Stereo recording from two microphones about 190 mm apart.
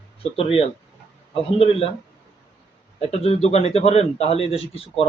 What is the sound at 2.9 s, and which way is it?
A man's voice, 30° left (ahead or behind).